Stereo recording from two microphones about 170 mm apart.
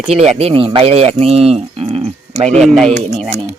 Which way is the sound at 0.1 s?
40° right (ahead or behind).